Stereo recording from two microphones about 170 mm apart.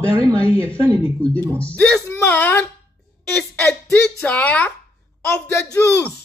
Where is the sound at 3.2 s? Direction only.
10° left (ahead or behind).